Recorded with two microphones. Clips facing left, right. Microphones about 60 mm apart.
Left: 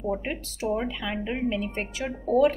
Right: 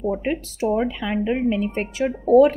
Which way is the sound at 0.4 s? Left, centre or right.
Right.